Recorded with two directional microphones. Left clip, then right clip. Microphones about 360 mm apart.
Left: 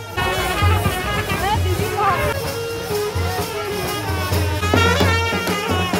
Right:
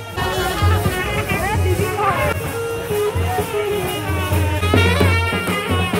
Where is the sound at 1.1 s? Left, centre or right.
Centre.